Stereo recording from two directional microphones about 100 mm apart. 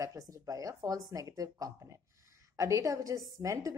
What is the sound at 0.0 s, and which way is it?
Speech, 35° right (ahead or behind).